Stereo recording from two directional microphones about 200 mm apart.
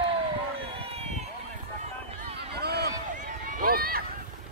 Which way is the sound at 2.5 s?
55° right (ahead or behind).